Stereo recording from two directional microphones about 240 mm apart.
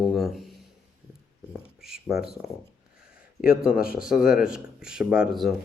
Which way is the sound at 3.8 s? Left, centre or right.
Left.